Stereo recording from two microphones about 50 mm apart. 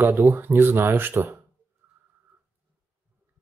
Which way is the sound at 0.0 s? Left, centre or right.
Right.